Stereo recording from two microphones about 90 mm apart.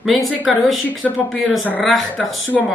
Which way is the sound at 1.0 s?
10° left (ahead or behind).